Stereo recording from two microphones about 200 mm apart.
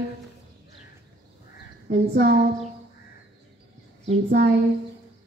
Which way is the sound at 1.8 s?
50° right (ahead or behind).